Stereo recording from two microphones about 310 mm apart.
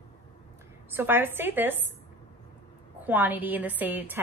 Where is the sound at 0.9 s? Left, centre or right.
Centre.